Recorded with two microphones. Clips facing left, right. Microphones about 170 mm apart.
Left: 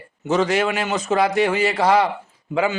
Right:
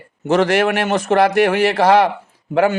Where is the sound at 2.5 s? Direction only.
55° right (ahead or behind).